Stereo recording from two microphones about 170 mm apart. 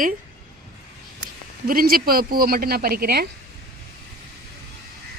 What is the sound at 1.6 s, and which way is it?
A woman's voice, 60° right (ahead or behind).